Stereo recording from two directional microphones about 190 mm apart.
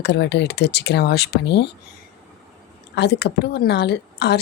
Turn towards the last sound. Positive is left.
turn(degrees=60)  # may be behind; listen again after turning